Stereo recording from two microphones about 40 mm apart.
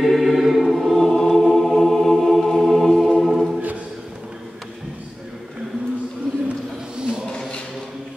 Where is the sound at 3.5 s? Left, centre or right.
Right.